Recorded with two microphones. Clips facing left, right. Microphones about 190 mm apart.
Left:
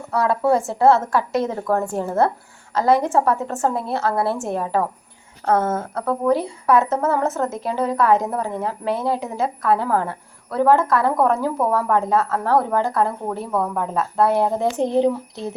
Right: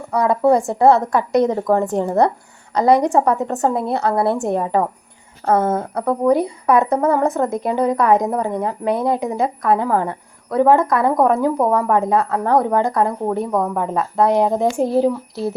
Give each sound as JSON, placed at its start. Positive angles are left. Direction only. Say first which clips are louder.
{"t": 0.1, "sound": "a woman's voice", "louder": "right 3 dB", "side_deg": -15}
{"t": 13.7, "sound": "a woman's voice", "louder": "right 2 dB", "side_deg": -5}